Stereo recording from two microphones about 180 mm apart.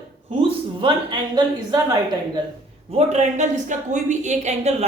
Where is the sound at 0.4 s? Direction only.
30° right (ahead or behind).